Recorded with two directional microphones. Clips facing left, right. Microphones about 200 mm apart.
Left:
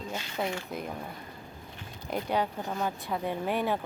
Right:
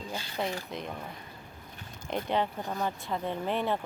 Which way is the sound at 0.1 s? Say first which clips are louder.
Left 1 dB; 30° right (ahead or behind).